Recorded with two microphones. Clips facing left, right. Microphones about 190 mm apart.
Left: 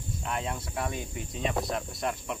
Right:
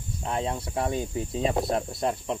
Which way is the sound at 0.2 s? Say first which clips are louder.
Right 5 dB; 30° right (ahead or behind).